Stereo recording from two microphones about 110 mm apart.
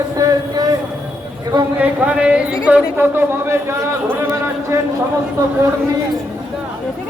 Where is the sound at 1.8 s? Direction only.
10° right (ahead or behind).